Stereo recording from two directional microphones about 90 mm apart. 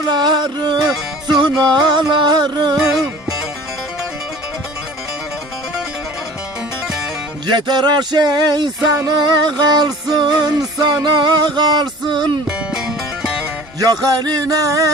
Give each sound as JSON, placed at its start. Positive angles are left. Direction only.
{"t": 0.1, "sound": "music", "side_deg": -55}
{"t": 7.4, "sound": "speech", "side_deg": -55}
{"t": 9.0, "sound": "music", "side_deg": -55}
{"t": 12.5, "sound": "music", "side_deg": -10}
{"t": 13.7, "sound": "music", "side_deg": -45}